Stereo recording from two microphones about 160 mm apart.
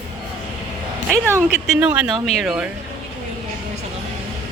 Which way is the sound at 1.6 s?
Centre (ahead or behind).